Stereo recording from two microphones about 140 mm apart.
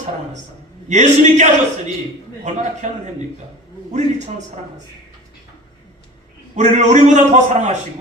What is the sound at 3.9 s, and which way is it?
Speech, 55° right (ahead or behind).